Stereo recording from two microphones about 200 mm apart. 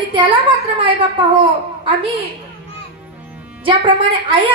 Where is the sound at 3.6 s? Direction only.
25° right (ahead or behind).